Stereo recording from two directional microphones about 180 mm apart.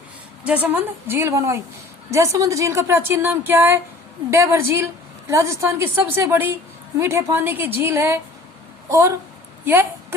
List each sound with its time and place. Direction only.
0.4 s a woman's voice: 10° right (ahead or behind)